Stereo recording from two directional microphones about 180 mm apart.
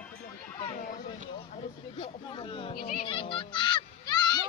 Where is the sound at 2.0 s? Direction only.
30° left (ahead or behind).